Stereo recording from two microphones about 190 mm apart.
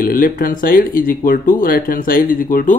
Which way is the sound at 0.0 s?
50° left (ahead or behind).